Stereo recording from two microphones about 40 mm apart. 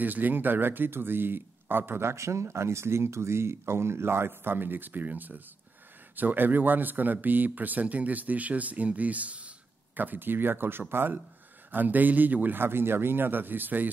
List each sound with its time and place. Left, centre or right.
0.0 s speech: right
9.9 s speech: right
11.7 s speech: right
12.5 s speech: right